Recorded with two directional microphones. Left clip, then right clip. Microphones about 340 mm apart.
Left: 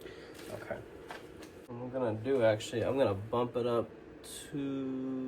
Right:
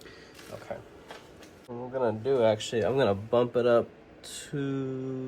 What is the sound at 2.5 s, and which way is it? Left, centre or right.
Speech, right.